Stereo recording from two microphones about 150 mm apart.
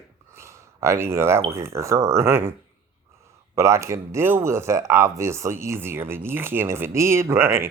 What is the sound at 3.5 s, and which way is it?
Speech, 20° right (ahead or behind).